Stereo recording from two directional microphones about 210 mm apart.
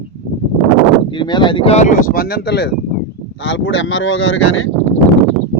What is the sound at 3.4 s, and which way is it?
Speech, 65° left (ahead or behind).